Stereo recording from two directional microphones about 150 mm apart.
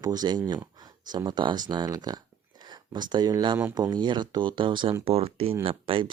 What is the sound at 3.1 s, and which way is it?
Speech, 25° right (ahead or behind).